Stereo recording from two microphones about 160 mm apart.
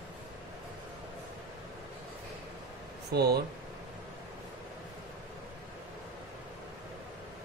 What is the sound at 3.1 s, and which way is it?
Speech, 80° right.